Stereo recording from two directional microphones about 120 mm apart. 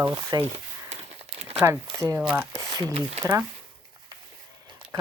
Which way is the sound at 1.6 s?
25° right (ahead or behind).